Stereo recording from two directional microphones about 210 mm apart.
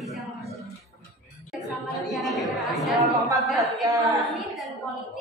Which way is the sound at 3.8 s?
15° right (ahead or behind).